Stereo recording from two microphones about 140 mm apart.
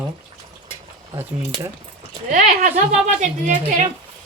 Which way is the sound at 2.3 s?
70° right (ahead or behind).